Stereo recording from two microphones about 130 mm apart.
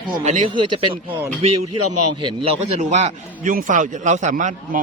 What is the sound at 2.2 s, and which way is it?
A man's voice, 50° right (ahead or behind).